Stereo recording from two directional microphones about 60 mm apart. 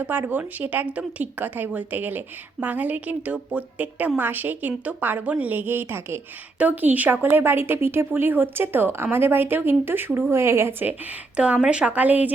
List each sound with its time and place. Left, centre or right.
0.0 s a woman's voice: right
6.6 s a woman's voice: right
11.3 s speech: right
11.9 s speech: right